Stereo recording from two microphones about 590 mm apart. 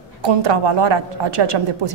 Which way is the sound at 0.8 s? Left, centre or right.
Right.